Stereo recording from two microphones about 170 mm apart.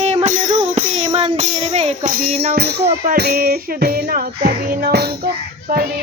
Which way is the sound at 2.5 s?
75° right (ahead or behind).